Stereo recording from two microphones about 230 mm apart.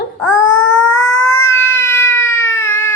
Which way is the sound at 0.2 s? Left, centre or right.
Centre.